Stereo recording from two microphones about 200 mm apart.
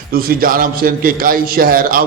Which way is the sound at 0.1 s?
45° right (ahead or behind).